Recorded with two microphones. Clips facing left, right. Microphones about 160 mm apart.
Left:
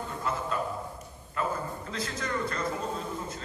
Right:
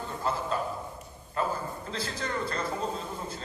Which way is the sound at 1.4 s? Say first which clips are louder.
Right 1 dB; 30° right (ahead or behind).